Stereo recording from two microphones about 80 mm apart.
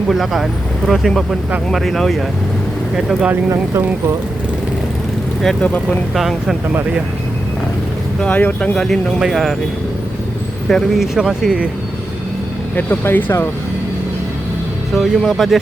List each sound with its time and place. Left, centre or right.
0.1 s speech: centre
5.6 s speech: left
6.1 s speech: centre
8.2 s speech: left
8.7 s speech: centre
9.1 s speech: centre
10.7 s speech: centre
12.7 s speech: left
14.9 s speech: centre